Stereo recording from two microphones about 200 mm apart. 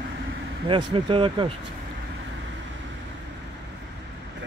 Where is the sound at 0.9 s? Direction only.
25° right (ahead or behind).